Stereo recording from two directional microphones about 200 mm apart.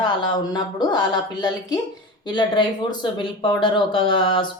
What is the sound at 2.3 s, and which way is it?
A woman's voice, 20° left (ahead or behind).